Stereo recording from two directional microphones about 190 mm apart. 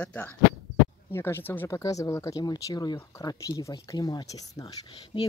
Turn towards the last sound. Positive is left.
turn(degrees=25)  # may be behind; listen again after turning